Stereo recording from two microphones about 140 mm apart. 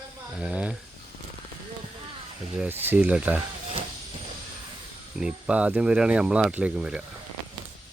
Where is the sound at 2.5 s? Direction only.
10° right (ahead or behind).